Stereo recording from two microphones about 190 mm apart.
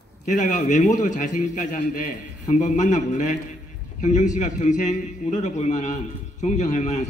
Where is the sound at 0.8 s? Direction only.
40° left (ahead or behind).